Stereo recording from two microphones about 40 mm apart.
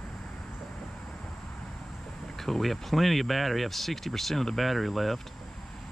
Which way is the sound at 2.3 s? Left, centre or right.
Centre.